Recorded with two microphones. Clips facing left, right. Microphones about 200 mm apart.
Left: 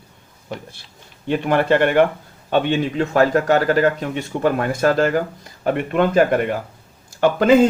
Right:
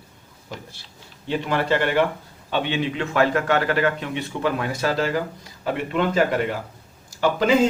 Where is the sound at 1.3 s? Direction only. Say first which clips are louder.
Left 5 dB; 55° left (ahead or behind).